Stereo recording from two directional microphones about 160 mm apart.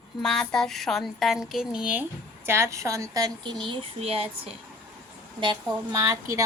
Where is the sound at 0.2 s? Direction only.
5° left (ahead or behind).